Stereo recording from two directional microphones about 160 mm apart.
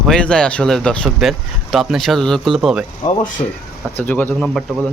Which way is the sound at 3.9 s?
10° left (ahead or behind).